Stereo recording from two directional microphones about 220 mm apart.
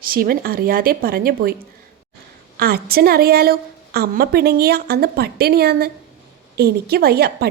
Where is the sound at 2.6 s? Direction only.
45° right (ahead or behind).